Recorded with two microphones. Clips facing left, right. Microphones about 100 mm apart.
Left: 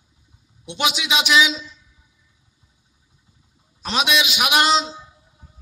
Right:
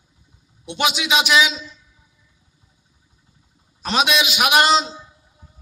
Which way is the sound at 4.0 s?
45° right (ahead or behind).